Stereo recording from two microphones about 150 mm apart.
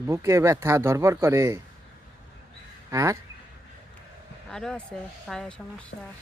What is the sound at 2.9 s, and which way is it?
Speech, 20° right (ahead or behind).